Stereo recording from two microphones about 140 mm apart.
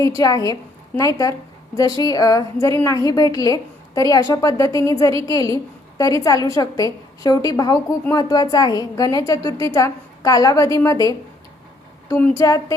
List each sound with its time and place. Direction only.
0.0 s a woman's voice: 25° left (ahead or behind)